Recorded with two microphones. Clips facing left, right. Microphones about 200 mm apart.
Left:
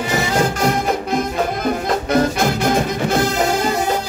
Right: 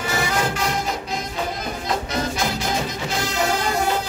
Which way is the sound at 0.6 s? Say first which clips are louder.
Left 7 dB; 55° left (ahead or behind).